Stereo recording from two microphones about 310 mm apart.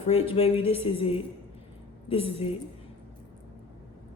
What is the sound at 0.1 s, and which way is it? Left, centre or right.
Music, centre.